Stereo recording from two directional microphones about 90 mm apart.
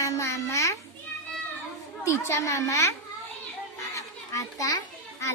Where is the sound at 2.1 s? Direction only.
35° left (ahead or behind).